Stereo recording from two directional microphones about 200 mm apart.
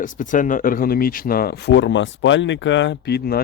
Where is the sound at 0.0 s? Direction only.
40° left (ahead or behind).